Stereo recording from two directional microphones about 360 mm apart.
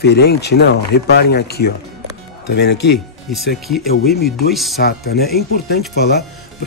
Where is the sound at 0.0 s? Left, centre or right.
Left.